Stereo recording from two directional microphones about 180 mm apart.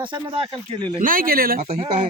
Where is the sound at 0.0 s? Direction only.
30° right (ahead or behind).